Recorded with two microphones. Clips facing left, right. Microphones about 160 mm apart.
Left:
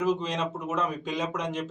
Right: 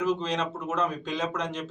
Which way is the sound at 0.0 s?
10° left (ahead or behind).